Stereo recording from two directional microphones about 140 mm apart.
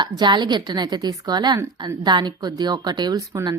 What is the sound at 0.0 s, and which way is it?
A woman's voice, 35° right (ahead or behind).